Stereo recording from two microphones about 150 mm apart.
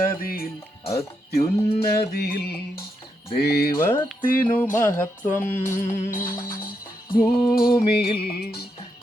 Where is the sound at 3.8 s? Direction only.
15° left (ahead or behind).